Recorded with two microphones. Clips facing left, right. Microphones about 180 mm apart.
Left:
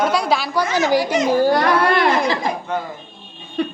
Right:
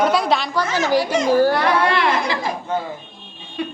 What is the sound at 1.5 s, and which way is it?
Speech, 40° left (ahead or behind).